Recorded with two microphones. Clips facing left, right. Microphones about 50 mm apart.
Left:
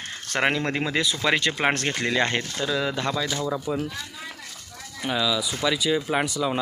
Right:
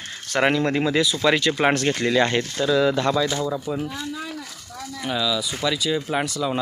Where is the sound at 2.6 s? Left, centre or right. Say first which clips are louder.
Right 8 dB; centre.